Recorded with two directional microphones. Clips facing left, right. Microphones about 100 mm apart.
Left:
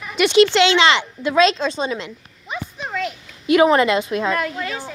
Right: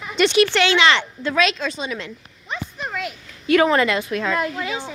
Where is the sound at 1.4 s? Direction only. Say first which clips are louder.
Left 5 dB; 30° left (ahead or behind).